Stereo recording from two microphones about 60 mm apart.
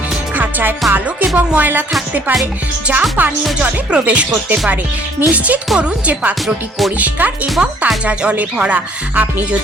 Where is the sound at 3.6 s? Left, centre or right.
Right.